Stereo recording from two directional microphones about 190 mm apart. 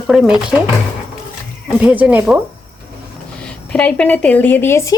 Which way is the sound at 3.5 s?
5° left (ahead or behind).